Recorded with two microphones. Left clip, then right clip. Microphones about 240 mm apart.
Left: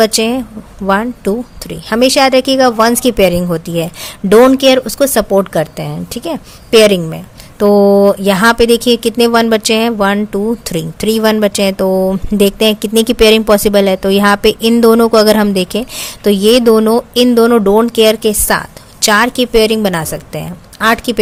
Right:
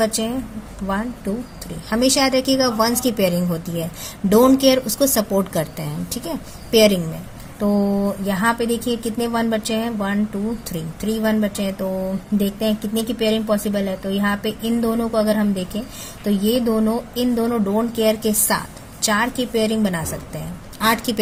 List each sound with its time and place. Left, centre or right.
0.0 s speech: left
7.6 s speech: left